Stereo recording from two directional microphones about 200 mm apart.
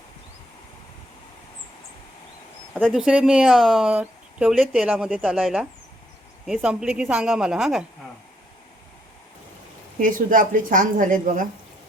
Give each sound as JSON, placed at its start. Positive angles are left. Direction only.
{"t": 2.8, "sound": "speech", "side_deg": 0}
{"t": 10.0, "sound": "a woman's voice", "side_deg": -45}